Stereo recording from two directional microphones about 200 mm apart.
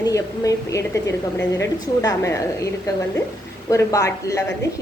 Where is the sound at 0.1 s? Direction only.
15° left (ahead or behind).